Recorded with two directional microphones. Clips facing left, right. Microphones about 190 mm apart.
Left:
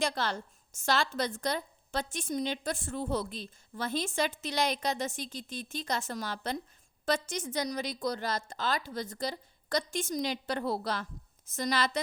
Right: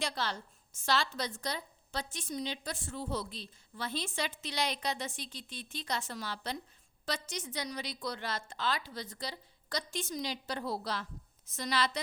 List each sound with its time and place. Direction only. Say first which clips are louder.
0.0 s a woman's voice: left 5 dB; 50° left (ahead or behind)